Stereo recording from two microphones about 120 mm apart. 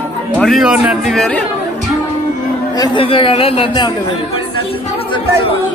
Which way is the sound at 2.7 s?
35° left (ahead or behind).